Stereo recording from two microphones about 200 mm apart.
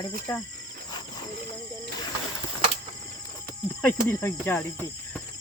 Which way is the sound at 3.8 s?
10° left (ahead or behind).